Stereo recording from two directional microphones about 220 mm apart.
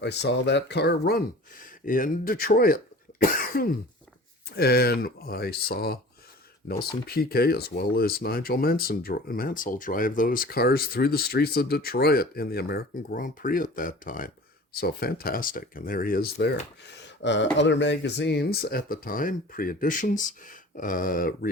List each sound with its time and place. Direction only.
0.0 s speech: 50° left (ahead or behind)
7.1 s speech: 45° left (ahead or behind)
17.2 s speech: 55° left (ahead or behind)